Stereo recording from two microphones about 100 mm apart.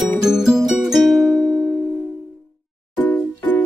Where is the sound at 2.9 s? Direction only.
15° left (ahead or behind).